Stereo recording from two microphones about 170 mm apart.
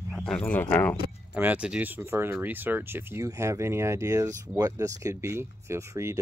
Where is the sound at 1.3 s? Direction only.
10° right (ahead or behind).